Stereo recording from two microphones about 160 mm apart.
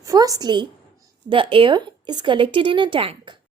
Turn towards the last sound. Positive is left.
turn(degrees=-35)  # may be behind; listen again after turning